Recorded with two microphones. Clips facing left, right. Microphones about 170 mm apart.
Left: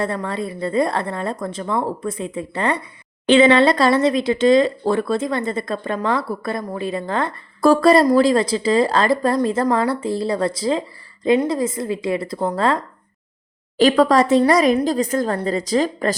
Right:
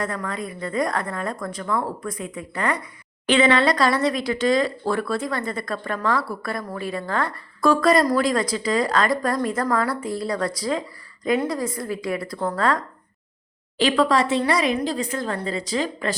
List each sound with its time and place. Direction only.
0.0 s speech: 30° left (ahead or behind)
13.7 s a woman's voice: 45° left (ahead or behind)